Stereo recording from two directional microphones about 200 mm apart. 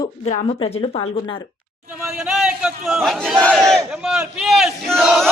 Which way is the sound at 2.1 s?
5° right (ahead or behind).